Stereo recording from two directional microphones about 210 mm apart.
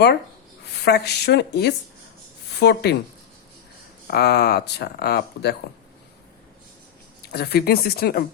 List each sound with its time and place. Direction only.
0.6 s a woman's voice: 50° left (ahead or behind)
4.0 s speech: 50° left (ahead or behind)
7.2 s speech: 50° left (ahead or behind)